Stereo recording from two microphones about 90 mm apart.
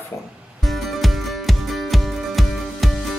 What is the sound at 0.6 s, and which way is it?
Music, centre (ahead or behind).